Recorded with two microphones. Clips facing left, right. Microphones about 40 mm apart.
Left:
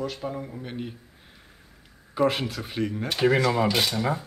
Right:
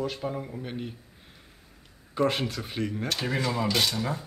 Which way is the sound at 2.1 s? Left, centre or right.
Centre.